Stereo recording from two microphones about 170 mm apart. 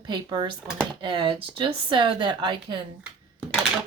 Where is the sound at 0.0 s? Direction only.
25° right (ahead or behind).